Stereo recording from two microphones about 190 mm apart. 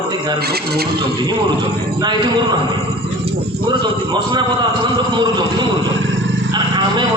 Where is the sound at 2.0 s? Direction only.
25° right (ahead or behind).